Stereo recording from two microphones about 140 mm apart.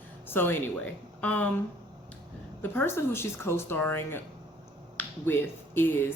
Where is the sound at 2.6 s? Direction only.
15° left (ahead or behind).